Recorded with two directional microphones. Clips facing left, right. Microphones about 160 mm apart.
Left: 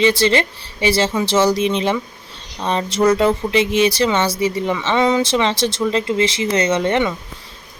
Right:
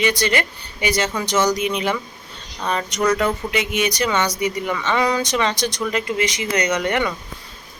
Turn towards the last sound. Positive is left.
turn(degrees=25)  # may be behind; listen again after turning